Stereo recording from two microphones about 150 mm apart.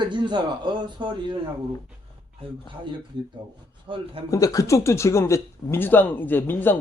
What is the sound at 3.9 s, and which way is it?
Speech, 40° right (ahead or behind).